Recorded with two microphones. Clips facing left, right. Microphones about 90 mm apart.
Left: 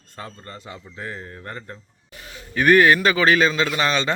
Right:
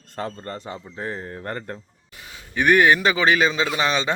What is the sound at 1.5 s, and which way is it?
Speech, 45° right (ahead or behind).